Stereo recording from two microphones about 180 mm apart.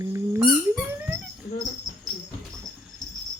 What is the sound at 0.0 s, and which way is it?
Dog, 15° right (ahead or behind).